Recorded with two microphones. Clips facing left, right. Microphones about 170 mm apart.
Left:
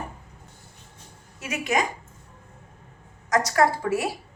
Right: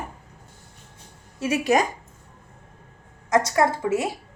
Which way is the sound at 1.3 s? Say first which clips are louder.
Right 5 dB; 30° right (ahead or behind).